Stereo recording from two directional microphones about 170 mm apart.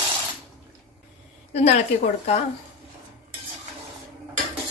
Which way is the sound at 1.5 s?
40° left (ahead or behind).